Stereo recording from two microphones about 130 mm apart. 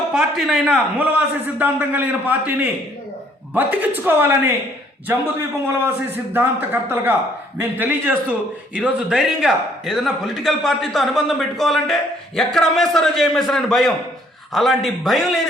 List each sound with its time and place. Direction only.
0.1 s a man's voice: 5° right (ahead or behind)
0.9 s a man's voice: 15° right (ahead or behind)